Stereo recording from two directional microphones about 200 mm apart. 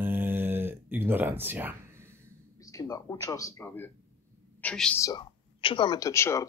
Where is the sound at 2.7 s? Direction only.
15° left (ahead or behind).